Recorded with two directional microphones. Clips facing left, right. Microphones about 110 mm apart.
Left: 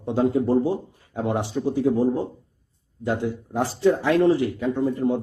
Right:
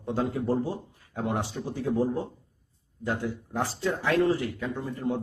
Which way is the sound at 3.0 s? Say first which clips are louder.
Left 5 dB; 20° left (ahead or behind).